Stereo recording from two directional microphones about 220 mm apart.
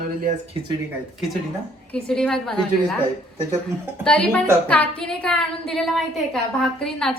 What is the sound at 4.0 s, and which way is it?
A woman's voice, 5° left (ahead or behind).